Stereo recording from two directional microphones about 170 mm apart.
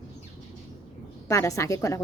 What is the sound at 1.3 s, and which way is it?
Speech, 15° left (ahead or behind).